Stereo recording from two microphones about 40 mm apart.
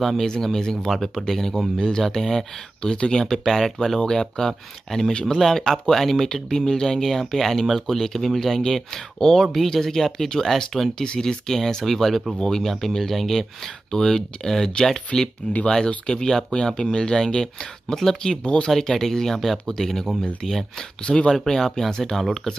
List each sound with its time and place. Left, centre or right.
0.0 s speech: centre
0.3 s speech: centre
3.3 s speech: centre
15.4 s speech: left
16.1 s speech: centre
18.7 s speech: centre
21.0 s speech: centre